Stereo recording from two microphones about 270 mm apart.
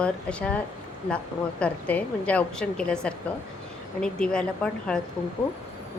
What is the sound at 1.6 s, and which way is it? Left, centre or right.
A woman's voice, centre.